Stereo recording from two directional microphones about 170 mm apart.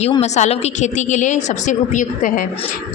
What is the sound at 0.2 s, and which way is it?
A woman's voice, 40° left (ahead or behind).